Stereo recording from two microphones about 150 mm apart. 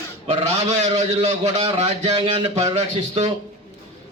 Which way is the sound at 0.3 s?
45° right (ahead or behind).